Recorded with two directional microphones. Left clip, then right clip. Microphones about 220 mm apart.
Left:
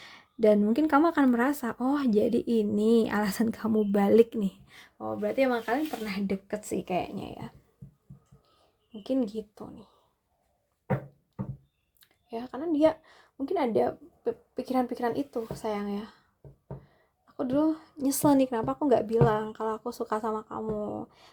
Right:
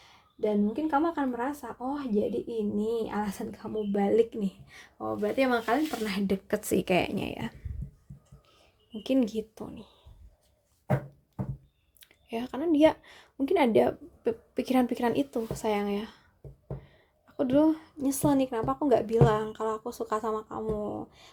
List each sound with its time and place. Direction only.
0.3 s speech: 40° left (ahead or behind); by 7.5 s 15° right (ahead or behind)
8.5 s speech: centre (ahead or behind)
11.9 s a woman's voice: 5° right (ahead or behind)
17.2 s a woman's voice: 5° right (ahead or behind)
17.9 s a woman's voice: 15° left (ahead or behind)